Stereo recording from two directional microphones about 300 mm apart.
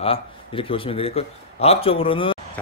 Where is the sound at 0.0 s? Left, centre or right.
Centre.